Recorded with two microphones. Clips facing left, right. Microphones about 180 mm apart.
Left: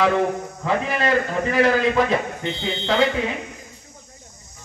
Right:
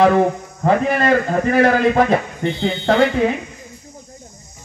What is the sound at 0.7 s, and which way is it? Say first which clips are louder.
Speech: right 6 dB; 50° right (ahead or behind).